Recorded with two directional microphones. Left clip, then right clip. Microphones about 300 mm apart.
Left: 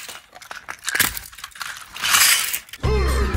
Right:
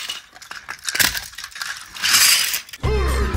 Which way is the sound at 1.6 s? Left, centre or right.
Left.